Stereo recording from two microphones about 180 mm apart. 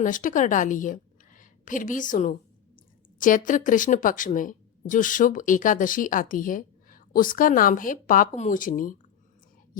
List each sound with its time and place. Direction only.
0.0 s a woman's voice: 50° left (ahead or behind)